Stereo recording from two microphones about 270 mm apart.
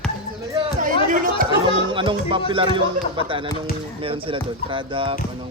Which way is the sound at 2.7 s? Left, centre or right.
Centre.